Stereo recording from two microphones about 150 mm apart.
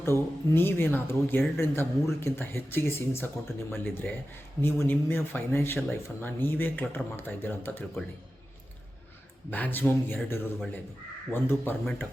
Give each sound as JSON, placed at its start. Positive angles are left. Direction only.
{"t": 0.0, "sound": "speech", "side_deg": 15}
{"t": 9.5, "sound": "speech", "side_deg": 10}